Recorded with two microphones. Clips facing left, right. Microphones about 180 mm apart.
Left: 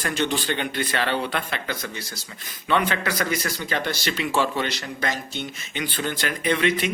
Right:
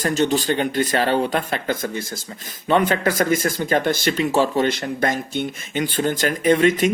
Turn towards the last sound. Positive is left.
turn(degrees=-45)  # may be behind; listen again after turning